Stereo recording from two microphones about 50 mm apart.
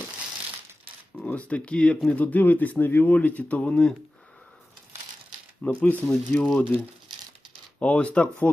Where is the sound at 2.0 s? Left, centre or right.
Left.